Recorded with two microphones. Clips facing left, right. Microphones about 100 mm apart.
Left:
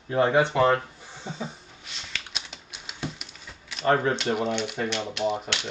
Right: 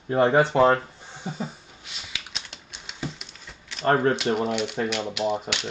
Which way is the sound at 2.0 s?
5° right (ahead or behind).